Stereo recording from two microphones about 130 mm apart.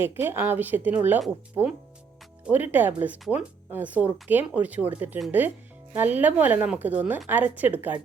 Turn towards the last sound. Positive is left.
turn(degrees=-15)  # may be behind; listen again after turning